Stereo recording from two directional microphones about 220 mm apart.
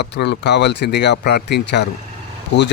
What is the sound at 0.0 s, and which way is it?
Speech, 50° left (ahead or behind).